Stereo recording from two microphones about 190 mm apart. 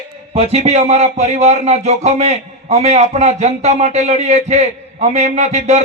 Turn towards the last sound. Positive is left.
turn(degrees=-35)  # may be behind; listen again after turning